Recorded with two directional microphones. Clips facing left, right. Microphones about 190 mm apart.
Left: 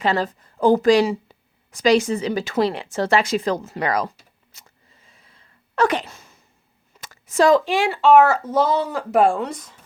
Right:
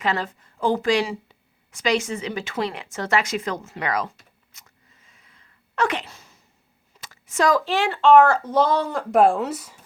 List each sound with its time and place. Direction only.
0.0 s a woman's voice: 35° left (ahead or behind)
4.5 s sneeze: 30° left (ahead or behind); by 6.3 s 50° left (ahead or behind)
7.0 s a sound: 40° left (ahead or behind)
7.6 s speech: 10° left (ahead or behind); by 9.8 s 10° right (ahead or behind)